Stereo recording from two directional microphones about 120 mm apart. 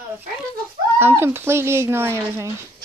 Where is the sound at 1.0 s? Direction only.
20° right (ahead or behind).